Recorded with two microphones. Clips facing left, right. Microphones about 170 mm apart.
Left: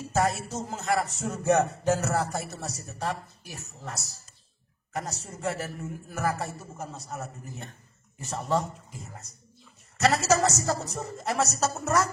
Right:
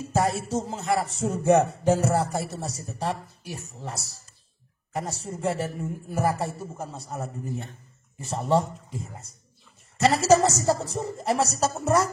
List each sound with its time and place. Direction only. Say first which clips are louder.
0.1 s a man's voice: right 2 dB; 30° right (ahead or behind)
9.9 s a man's voice: right 4 dB; 30° right (ahead or behind)